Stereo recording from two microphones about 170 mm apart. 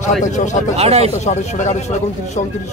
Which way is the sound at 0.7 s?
40° right (ahead or behind).